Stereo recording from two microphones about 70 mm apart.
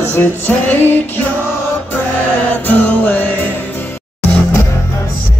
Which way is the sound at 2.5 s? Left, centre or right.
Left.